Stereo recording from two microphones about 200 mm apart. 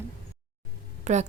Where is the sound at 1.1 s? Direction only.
35° right (ahead or behind).